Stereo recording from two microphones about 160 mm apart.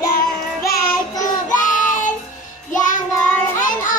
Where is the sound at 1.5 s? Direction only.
55° left (ahead or behind).